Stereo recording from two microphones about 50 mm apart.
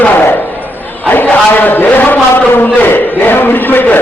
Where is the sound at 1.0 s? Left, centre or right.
Left.